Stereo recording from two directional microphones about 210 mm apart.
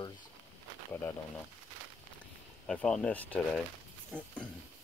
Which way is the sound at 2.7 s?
5° left (ahead or behind).